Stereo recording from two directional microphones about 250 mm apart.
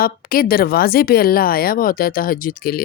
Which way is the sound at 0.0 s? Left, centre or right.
Left.